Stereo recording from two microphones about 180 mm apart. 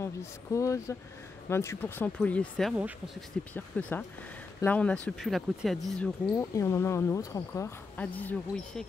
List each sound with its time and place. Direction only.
0.0 s speech: 15° left (ahead or behind)
6.2 s speech: 15° left (ahead or behind)